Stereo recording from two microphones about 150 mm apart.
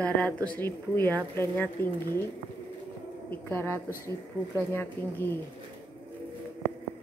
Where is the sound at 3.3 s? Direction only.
15° left (ahead or behind).